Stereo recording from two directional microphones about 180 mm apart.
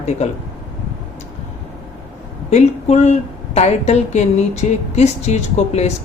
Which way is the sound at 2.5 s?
40° left (ahead or behind).